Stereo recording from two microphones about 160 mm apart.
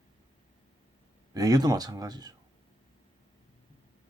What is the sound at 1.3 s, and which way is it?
Speech, 25° right (ahead or behind).